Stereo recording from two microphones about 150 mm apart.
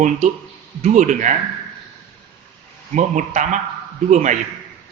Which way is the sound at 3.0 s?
55° right (ahead or behind).